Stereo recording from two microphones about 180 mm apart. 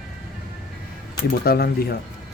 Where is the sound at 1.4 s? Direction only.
60° left (ahead or behind).